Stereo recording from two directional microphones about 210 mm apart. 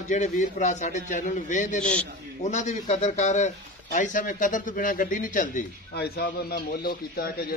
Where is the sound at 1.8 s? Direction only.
5° left (ahead or behind).